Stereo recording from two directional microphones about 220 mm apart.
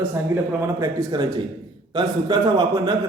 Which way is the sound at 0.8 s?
20° right (ahead or behind).